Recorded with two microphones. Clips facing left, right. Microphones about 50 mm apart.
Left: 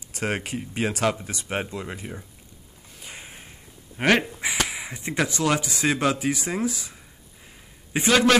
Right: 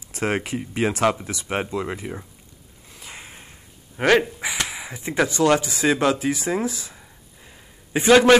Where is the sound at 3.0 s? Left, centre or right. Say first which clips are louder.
Right 1 dB; centre.